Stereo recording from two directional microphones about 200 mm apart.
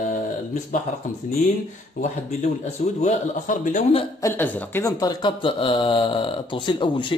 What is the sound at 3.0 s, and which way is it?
A man's voice, 35° left (ahead or behind).